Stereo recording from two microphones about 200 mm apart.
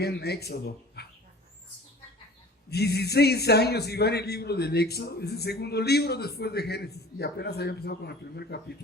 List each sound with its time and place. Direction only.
0.0 s speech: 55° left (ahead or behind)
2.6 s speech: 55° left (ahead or behind)